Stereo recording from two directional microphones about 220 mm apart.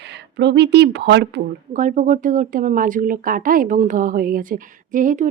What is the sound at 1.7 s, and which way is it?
Speech, 35° right (ahead or behind).